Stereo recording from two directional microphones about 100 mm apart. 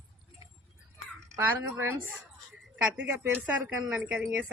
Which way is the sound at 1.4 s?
20° right (ahead or behind).